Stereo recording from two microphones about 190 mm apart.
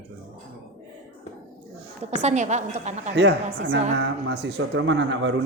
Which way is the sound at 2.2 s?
40° right (ahead or behind).